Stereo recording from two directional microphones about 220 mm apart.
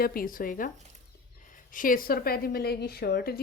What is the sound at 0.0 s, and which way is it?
Speech, 40° left (ahead or behind).